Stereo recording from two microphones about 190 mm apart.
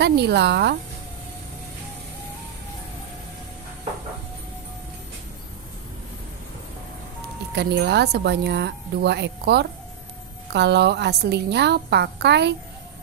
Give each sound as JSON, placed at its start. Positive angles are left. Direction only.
{"t": 0.0, "sound": "speech", "side_deg": -60}
{"t": 7.5, "sound": "speech", "side_deg": -60}